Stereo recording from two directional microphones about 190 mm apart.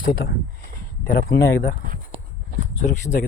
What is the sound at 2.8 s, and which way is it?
Speech, 40° left (ahead or behind).